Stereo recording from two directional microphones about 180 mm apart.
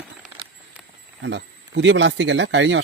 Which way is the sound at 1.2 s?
80° right.